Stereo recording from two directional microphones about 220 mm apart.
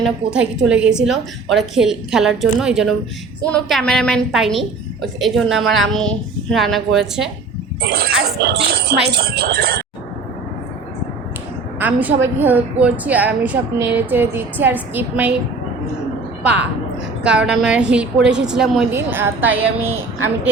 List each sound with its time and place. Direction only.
0.0 s a woman's voice: 5° right (ahead or behind)
7.8 s speech: 45° right (ahead or behind)
11.8 s a woman's voice: 5° right (ahead or behind)
17.2 s a woman's voice: 5° right (ahead or behind)